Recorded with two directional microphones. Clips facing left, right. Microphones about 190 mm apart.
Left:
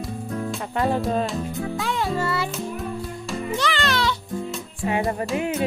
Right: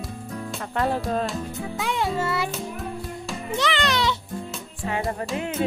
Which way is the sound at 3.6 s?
20° right (ahead or behind).